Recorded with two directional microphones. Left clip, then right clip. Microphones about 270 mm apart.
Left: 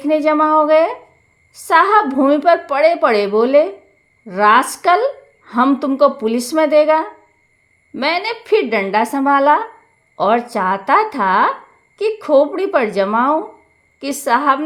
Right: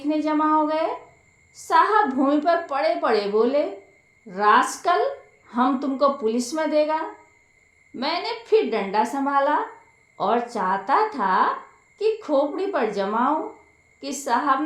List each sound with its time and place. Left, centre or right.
0.0 s a woman's voice: left